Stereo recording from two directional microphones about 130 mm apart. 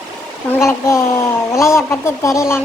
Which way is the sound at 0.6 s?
20° left (ahead or behind).